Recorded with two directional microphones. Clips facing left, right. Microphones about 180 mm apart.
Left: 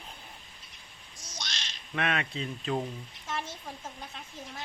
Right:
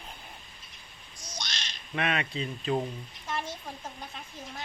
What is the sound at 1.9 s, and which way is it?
Speech, 5° right (ahead or behind).